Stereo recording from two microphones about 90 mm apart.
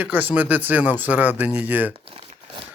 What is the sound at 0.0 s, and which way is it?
Speech, 20° right (ahead or behind).